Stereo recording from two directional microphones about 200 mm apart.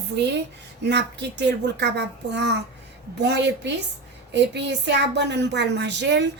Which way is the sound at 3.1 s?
55° right (ahead or behind).